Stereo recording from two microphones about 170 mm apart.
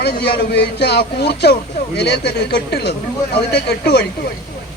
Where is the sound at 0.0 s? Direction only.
75° left (ahead or behind).